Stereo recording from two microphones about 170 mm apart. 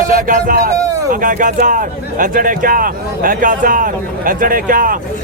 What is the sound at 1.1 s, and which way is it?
A man's voice, 50° right (ahead or behind).